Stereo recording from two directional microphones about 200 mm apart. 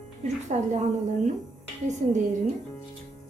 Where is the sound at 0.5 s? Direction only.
35° right (ahead or behind).